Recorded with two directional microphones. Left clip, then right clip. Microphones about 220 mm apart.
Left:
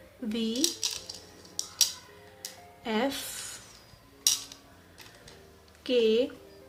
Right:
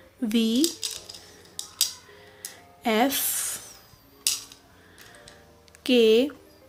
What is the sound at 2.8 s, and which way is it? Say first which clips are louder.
Speech: right 7 dB; 45° right (ahead or behind).